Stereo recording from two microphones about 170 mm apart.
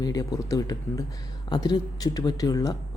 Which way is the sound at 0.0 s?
20° left (ahead or behind).